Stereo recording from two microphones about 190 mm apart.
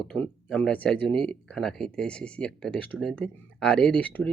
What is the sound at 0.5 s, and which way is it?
Speech, 5° left (ahead or behind).